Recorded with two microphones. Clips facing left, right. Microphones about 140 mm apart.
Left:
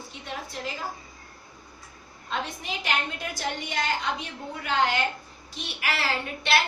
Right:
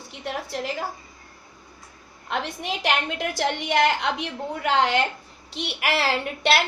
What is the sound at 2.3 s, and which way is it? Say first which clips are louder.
A woman's voice: right 4 dB; 75° right (ahead or behind).